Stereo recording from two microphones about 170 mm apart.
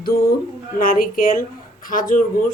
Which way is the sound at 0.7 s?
55° left (ahead or behind).